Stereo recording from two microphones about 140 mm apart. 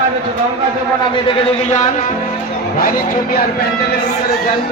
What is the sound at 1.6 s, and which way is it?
Speech, 55° left (ahead or behind).